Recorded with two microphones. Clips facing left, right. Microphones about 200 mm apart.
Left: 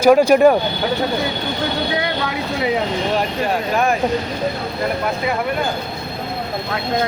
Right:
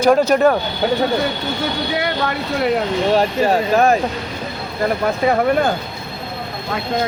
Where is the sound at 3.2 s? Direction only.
40° right (ahead or behind).